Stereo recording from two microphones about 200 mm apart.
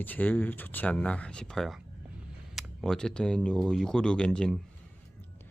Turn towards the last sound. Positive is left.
turn(degrees=5)  # may be behind; listen again after turning